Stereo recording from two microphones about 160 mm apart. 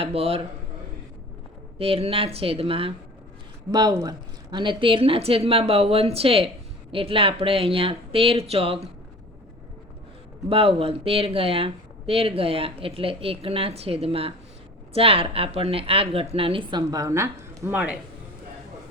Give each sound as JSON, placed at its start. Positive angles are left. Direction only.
{"t": 0.0, "sound": "speech", "side_deg": -35}
{"t": 1.8, "sound": "speech", "side_deg": -35}
{"t": 3.7, "sound": "speech", "side_deg": -25}
{"t": 10.5, "sound": "speech", "side_deg": -35}